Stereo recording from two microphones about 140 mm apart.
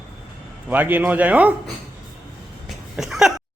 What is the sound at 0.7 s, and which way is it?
Speech, 10° right (ahead or behind).